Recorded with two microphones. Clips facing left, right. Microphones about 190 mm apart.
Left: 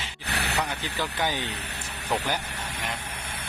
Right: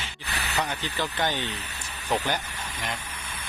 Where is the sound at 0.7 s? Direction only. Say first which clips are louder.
Right 1 dB; 10° left (ahead or behind).